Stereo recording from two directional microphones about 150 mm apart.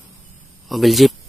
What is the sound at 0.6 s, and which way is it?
Speech, centre (ahead or behind).